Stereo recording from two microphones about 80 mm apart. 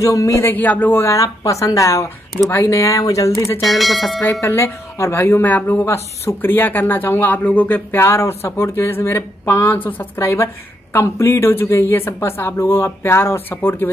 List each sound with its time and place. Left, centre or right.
0.0 s speech: left
0.5 s a woman's voice: left
1.1 s speech: left
3.6 s speech: centre
4.4 s a woman's voice: left